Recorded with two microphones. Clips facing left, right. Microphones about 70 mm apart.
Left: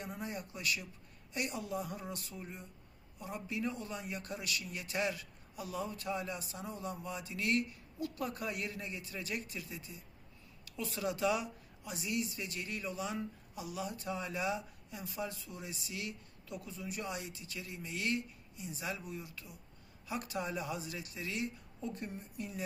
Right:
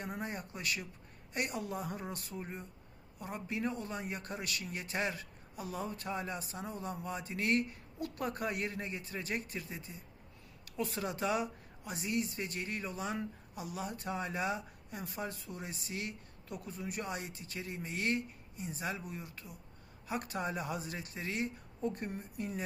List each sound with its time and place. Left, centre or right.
0.0 s speech: right